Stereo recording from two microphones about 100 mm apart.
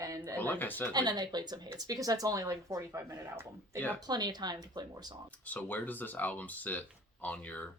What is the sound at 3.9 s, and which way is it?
Speech, 40° right (ahead or behind).